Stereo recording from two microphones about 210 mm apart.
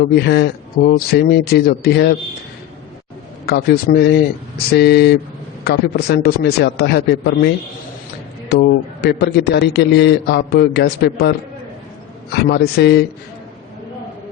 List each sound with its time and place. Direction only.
0.0 s a man's voice: 50° left (ahead or behind)
3.4 s a man's voice: 50° left (ahead or behind)